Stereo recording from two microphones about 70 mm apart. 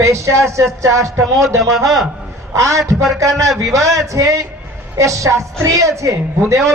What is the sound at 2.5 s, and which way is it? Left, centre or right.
A woman's voice, right.